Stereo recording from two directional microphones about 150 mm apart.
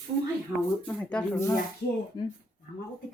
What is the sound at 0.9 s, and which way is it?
Speech, 10° left (ahead or behind).